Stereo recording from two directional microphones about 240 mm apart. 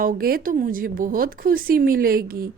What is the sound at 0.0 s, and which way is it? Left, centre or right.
Speech, right.